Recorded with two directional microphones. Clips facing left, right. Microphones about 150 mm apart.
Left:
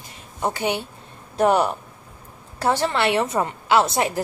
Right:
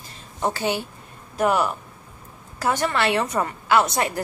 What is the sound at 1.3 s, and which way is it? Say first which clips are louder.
A woman's voice: left 3 dB; 30° left (ahead or behind).